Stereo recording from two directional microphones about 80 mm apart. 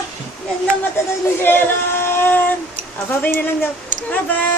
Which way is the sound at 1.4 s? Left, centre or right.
Left.